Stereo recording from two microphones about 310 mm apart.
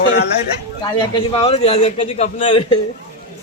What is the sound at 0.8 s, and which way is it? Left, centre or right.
A man's voice, centre.